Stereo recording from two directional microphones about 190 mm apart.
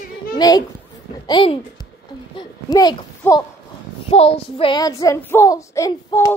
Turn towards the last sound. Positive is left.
turn(degrees=15)  # may be behind; listen again after turning